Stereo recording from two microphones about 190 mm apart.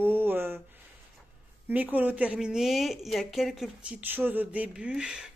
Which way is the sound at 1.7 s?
10° right (ahead or behind).